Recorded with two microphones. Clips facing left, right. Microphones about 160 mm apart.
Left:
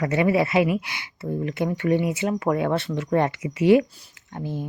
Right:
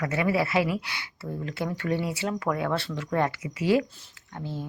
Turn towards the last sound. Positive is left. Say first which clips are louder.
# left 4 dB
turn(degrees=15)  # may be behind; listen again after turning